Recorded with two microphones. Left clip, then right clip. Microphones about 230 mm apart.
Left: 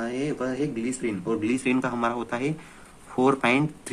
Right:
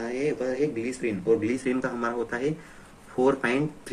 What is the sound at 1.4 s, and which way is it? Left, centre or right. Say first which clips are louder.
Speech: left 2 dB; left.